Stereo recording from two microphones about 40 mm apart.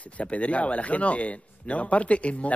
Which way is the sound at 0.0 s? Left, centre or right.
Left.